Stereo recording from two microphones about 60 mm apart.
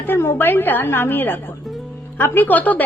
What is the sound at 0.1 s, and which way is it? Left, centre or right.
Speech, left.